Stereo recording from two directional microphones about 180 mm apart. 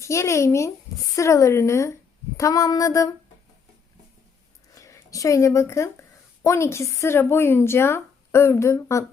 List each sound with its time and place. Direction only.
0.0 s speech: 15° left (ahead or behind)
2.4 s a sound: 20° left (ahead or behind)
4.7 s speech: 15° left (ahead or behind)